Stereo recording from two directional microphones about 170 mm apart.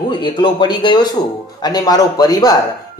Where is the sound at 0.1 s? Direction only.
25° left (ahead or behind).